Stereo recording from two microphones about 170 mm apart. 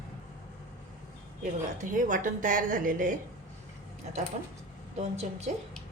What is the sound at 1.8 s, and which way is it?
A woman's voice, 50° right (ahead or behind).